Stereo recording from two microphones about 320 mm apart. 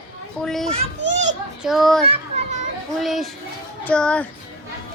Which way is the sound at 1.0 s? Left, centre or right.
Right.